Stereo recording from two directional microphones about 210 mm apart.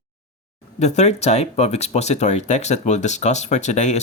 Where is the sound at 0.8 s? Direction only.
30° left (ahead or behind).